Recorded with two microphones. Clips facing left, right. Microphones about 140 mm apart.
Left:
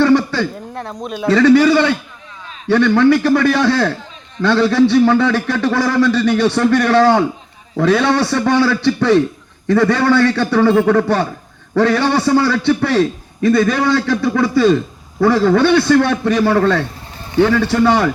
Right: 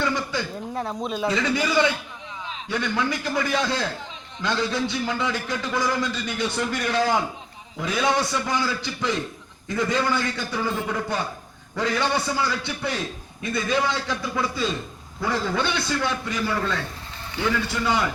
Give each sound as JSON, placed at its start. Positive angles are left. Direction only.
{"t": 0.0, "sound": "a sound", "side_deg": 70}
{"t": 0.7, "sound": "speech", "side_deg": 0}
{"t": 1.3, "sound": "a man's voice", "side_deg": 70}